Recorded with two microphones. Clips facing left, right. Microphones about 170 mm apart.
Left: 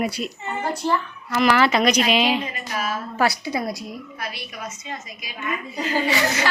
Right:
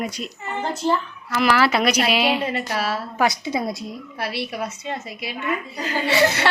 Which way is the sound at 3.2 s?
15° right (ahead or behind).